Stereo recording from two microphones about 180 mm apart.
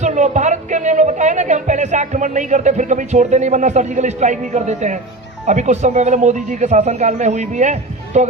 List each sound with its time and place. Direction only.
0.0 s speech: 40° right (ahead or behind)